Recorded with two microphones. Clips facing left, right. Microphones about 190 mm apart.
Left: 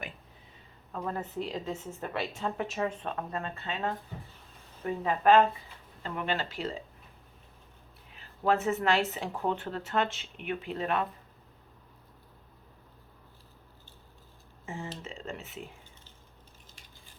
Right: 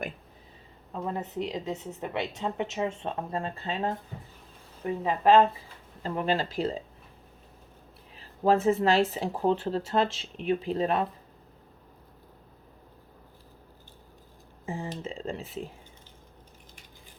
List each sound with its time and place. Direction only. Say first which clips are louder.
0.9 s speech: right 2 dB; 20° right (ahead or behind)
6.0 s speech: right 5 dB; 35° right (ahead or behind)
8.1 s speech: right 4 dB; 35° right (ahead or behind)
15.0 s speech: right 6 dB; 30° right (ahead or behind)